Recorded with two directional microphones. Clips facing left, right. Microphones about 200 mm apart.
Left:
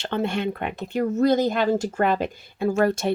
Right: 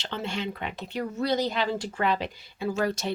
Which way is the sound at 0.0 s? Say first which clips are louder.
Left 7 dB; 55° left (ahead or behind).